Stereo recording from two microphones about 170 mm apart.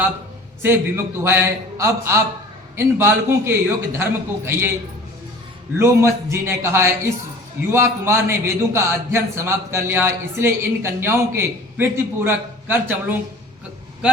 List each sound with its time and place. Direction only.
0.6 s a man's voice: 15° right (ahead or behind)
5.8 s a man's voice: 15° right (ahead or behind)